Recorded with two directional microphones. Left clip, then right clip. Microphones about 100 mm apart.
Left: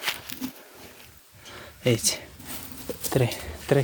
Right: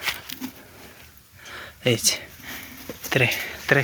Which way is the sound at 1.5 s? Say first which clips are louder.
Right 2 dB; 10° left (ahead or behind).